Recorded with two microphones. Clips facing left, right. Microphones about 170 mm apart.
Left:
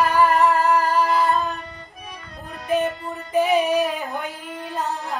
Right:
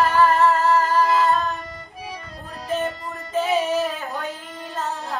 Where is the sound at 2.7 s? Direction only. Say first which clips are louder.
Left 3 dB; 15° left (ahead or behind).